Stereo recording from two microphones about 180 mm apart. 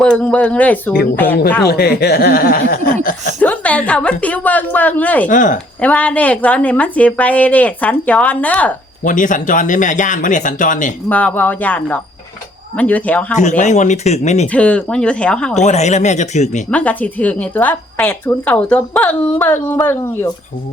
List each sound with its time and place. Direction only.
0.0 s a woman's voice: 5° left (ahead or behind)
1.6 s speech: 65° left (ahead or behind)
3.4 s a woman's voice: 10° left (ahead or behind)
5.3 s speech: 45° left (ahead or behind)
5.8 s a woman's voice: 10° left (ahead or behind)
9.0 s speech: 45° left (ahead or behind)
11.1 s a woman's voice: 10° left (ahead or behind)
13.6 s speech: 40° left (ahead or behind)
14.4 s speech: 5° left (ahead or behind)
15.6 s speech: 40° left (ahead or behind)
16.7 s a woman's voice: 10° left (ahead or behind)